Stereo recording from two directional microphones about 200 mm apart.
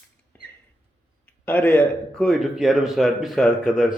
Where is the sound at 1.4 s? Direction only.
10° left (ahead or behind).